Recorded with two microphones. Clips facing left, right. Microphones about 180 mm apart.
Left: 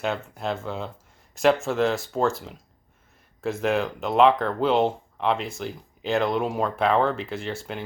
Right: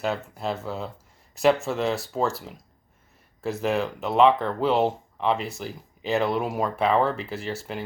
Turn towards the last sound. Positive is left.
turn(degrees=0)  # may be behind; listen again after turning